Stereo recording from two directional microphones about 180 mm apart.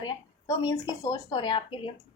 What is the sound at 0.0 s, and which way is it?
A woman's voice, 20° left (ahead or behind).